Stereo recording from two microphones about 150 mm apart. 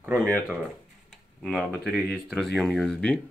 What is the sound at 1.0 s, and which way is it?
Speech, centre (ahead or behind).